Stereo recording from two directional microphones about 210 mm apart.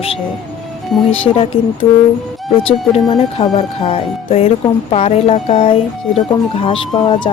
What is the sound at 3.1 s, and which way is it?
Speech, 30° left (ahead or behind).